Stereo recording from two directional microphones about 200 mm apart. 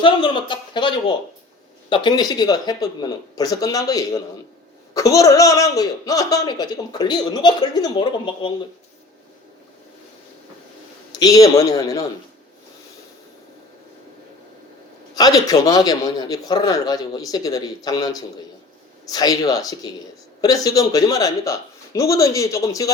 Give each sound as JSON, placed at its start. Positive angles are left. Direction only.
{"t": 0.0, "sound": "a man's voice", "side_deg": 25}
{"t": 11.2, "sound": "a man's voice", "side_deg": 20}
{"t": 15.1, "sound": "a man's voice", "side_deg": 20}